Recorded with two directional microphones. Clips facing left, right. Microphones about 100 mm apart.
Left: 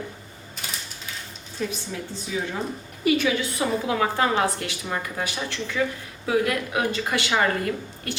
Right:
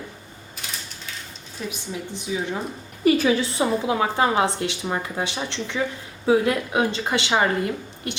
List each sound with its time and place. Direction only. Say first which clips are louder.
1.9 s a woman's voice: right 2 dB; 15° right (ahead or behind)
3.0 s a woman's voice: right 3 dB; 35° right (ahead or behind); by 8.1 s 20° right (ahead or behind)